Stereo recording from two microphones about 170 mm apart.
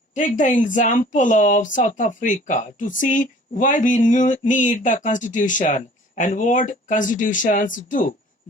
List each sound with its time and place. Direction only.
0.1 s speech: 50° left (ahead or behind)